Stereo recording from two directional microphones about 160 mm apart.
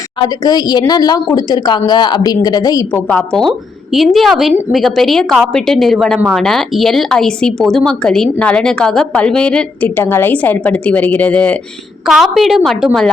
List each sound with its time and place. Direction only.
0.4 s a woman's voice: 25° left (ahead or behind)
3.1 s a woman's voice: 5° left (ahead or behind)